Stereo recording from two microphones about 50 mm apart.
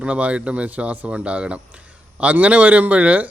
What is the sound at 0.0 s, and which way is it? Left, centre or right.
A man's voice, right.